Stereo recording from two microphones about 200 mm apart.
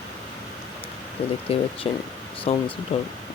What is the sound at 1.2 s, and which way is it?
Speech, 30° left (ahead or behind).